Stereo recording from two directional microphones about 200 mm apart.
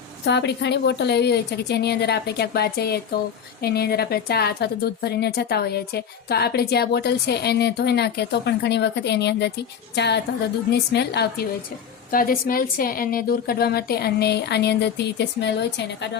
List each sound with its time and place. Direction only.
0.3 s a woman's voice: 60° left (ahead or behind)